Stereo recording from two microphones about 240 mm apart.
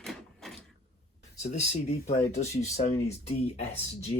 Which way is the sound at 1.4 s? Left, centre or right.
Left.